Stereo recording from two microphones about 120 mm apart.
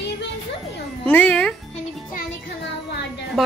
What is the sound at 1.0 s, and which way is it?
Cat, 15° left (ahead or behind).